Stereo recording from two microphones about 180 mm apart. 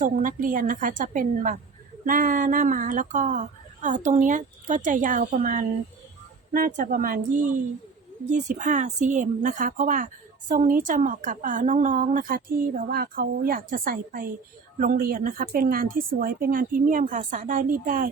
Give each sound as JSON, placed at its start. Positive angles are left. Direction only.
{"t": 0.0, "sound": "speech", "side_deg": -45}